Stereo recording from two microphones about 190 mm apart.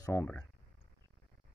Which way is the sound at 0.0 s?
15° left (ahead or behind).